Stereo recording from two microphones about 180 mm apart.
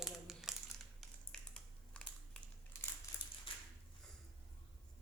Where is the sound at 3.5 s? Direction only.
30° left (ahead or behind).